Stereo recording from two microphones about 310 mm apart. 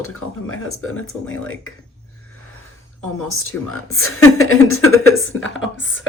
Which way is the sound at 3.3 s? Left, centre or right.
Left.